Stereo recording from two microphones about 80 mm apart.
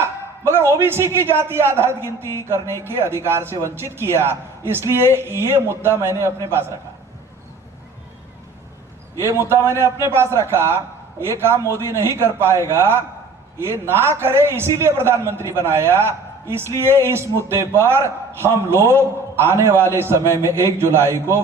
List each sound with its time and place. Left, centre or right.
0.0 s a man's voice: right
9.5 s a man's voice: right